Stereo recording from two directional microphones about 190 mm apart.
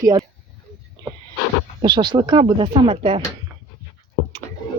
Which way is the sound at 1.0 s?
20° right (ahead or behind).